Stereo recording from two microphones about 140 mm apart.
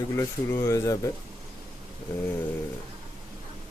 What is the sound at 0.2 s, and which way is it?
Speech, 20° left (ahead or behind).